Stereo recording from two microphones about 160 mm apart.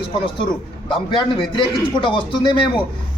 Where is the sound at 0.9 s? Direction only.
30° left (ahead or behind).